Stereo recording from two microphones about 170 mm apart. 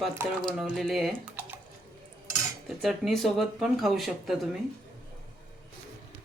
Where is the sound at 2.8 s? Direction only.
Centre (ahead or behind).